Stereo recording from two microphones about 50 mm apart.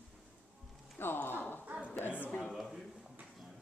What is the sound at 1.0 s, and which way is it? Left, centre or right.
Speech, left.